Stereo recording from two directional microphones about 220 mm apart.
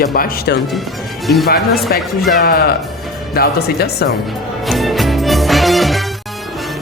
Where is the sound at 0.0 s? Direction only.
40° left (ahead or behind).